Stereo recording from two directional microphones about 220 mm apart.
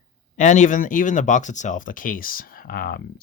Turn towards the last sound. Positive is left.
turn(degrees=40)  # may be behind; listen again after turning